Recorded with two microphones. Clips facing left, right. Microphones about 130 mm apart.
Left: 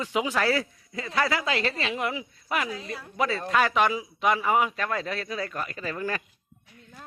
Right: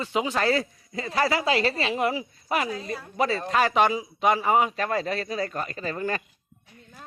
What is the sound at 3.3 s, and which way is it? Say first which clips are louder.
Speech: right 2 dB; 30° right (ahead or behind).